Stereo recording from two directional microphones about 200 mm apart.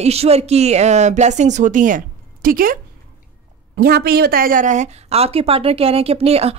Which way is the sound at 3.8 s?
50° right (ahead or behind).